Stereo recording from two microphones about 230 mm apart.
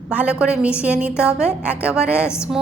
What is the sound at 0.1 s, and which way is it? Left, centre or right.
A woman's voice, centre.